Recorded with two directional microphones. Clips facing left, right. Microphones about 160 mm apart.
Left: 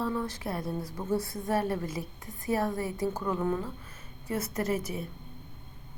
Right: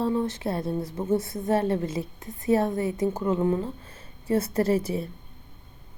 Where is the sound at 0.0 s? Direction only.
25° right (ahead or behind).